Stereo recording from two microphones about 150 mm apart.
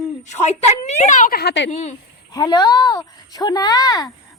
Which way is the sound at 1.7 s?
50° left (ahead or behind).